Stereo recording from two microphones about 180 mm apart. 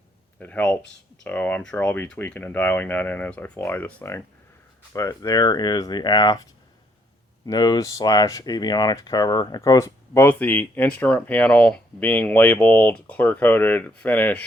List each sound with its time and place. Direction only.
0.3 s speech: 10° left (ahead or behind)